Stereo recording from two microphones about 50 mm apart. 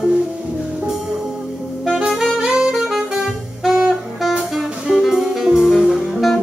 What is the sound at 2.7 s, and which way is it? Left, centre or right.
Saxophone, centre.